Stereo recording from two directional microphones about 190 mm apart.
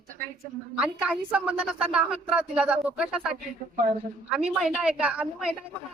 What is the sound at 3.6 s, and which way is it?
Speech, 40° right (ahead or behind).